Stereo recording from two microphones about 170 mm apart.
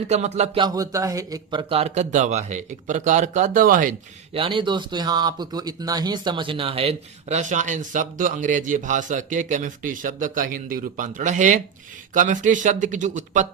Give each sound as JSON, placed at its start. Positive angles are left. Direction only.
{"t": 0.1, "sound": "speech", "side_deg": -40}
{"t": 0.6, "sound": "speech", "side_deg": -20}
{"t": 4.4, "sound": "speech", "side_deg": -30}